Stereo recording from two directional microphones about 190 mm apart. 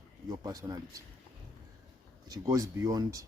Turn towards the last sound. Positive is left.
turn(degrees=-15)  # may be behind; listen again after turning